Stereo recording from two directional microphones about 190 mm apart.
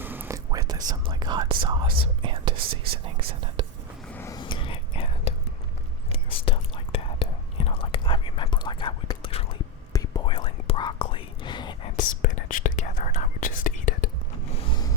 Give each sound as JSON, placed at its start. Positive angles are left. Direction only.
{"t": 0.0, "sound": "whispering", "side_deg": -10}
{"t": 3.6, "sound": "whispering", "side_deg": -25}
{"t": 4.1, "sound": "a sound", "side_deg": 10}
{"t": 4.4, "sound": "whispering", "side_deg": 25}
{"t": 11.9, "sound": "whispering", "side_deg": 45}
{"t": 14.5, "sound": "vehicle", "side_deg": 25}